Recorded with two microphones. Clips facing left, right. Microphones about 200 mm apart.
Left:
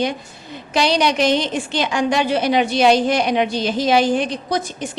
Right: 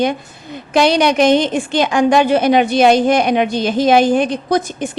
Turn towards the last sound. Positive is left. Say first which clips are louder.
# right 6 dB
turn(degrees=-55)  # may be behind; listen again after turning